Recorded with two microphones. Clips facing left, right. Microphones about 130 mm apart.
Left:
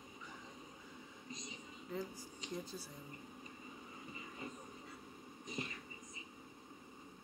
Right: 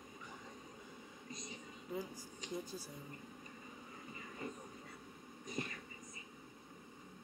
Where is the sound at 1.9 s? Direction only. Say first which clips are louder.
Even; 10° right (ahead or behind).